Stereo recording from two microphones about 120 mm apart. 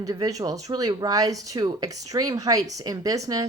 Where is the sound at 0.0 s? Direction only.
30° right (ahead or behind).